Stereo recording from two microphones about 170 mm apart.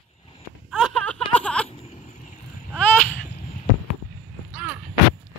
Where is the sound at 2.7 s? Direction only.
10° left (ahead or behind).